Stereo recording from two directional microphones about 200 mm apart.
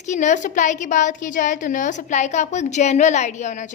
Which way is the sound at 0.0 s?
35° left (ahead or behind).